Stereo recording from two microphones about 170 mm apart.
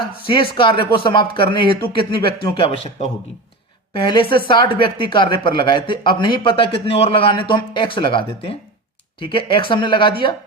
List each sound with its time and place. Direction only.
0.3 s speech: 30° left (ahead or behind)
3.9 s speech: 25° left (ahead or behind)